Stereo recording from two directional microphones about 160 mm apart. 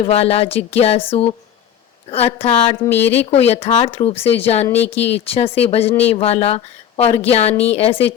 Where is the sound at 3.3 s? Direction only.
40° left (ahead or behind).